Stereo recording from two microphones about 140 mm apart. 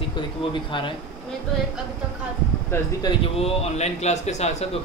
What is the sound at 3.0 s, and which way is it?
Speech, 40° left (ahead or behind).